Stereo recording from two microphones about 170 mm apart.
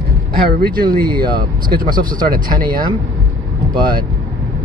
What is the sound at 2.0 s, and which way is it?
Speech, 55° right (ahead or behind).